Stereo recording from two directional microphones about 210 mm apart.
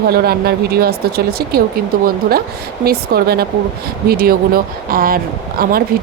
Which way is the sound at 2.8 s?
45° right (ahead or behind).